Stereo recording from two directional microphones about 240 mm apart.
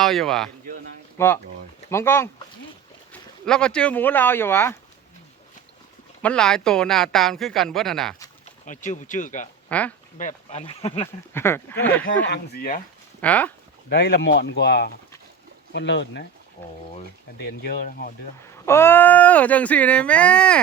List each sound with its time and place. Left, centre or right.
0.0 s speech: centre
6.2 s speech: centre
8.6 s speech: left
9.6 s speech: centre
10.2 s speech: left
11.3 s speech: centre
12.3 s speech: left
13.2 s speech: centre
13.9 s speech: left
17.3 s speech: left
18.6 s speech: centre